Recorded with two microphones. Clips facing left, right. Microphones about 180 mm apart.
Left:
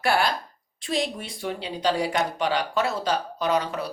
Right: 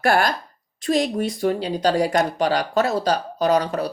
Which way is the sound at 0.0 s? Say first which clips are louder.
Right 4 dB; 45° right (ahead or behind).